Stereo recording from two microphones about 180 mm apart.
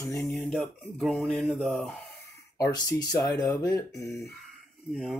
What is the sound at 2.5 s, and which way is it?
Speech, 20° left (ahead or behind).